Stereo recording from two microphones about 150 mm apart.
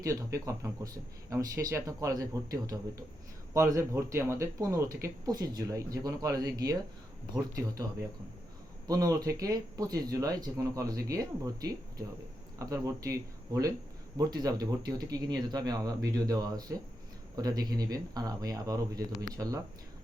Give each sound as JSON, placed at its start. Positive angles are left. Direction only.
{"t": 0.0, "sound": "speech", "side_deg": -20}
{"t": 8.9, "sound": "speech", "side_deg": -25}